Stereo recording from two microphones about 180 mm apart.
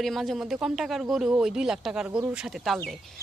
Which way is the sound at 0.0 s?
Centre (ahead or behind).